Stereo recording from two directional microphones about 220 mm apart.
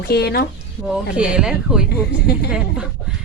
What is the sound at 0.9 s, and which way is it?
Speech, 5° right (ahead or behind).